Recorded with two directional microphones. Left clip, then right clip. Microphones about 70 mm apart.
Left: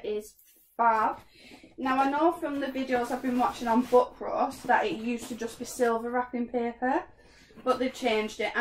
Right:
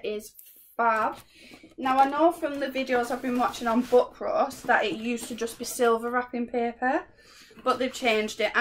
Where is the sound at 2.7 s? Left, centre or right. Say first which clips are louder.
Right 3 dB; centre.